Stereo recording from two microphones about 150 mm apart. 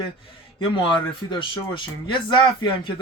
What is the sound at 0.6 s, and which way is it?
Speech, 35° left (ahead or behind).